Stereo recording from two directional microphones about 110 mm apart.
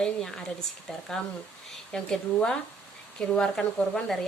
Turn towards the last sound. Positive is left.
turn(degrees=10)  # may be behind; listen again after turning